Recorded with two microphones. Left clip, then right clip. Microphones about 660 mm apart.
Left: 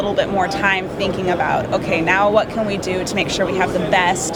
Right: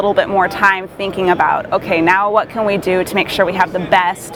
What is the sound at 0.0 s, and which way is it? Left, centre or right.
Speech, right.